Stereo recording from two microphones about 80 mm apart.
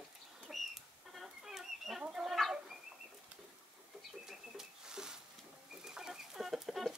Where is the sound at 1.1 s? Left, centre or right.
Centre.